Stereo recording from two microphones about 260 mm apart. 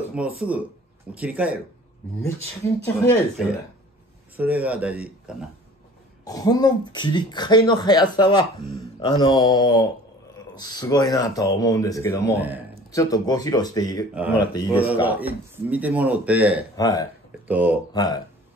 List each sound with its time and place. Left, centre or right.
0.4 s speech: centre
3.1 s speech: centre
4.4 s speech: centre
6.2 s speech: centre
12.4 s a man's voice: centre
12.9 s speech: centre
14.1 s speech: centre
14.5 s a man's voice: centre
15.0 s speech: centre
16.7 s speech: centre
17.5 s speech: centre
17.9 s speech: centre